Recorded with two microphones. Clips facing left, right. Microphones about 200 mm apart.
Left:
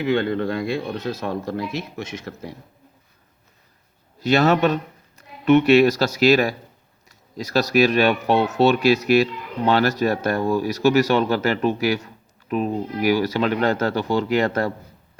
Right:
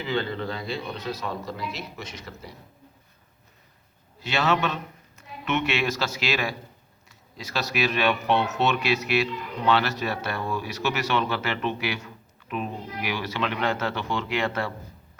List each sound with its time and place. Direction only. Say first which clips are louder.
0.0 s speech: left 7 dB; 50° left (ahead or behind)
4.2 s speech: left 8 dB; 40° left (ahead or behind)